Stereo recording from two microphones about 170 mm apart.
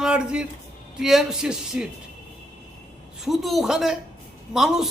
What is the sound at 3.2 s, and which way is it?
Speech, centre (ahead or behind).